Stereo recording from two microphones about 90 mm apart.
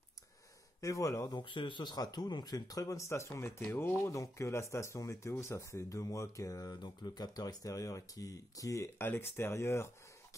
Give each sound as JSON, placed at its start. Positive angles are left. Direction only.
{"t": 0.7, "sound": "speech", "side_deg": 40}
{"t": 1.3, "sound": "speech", "side_deg": 65}
{"t": 2.0, "sound": "speech", "side_deg": 50}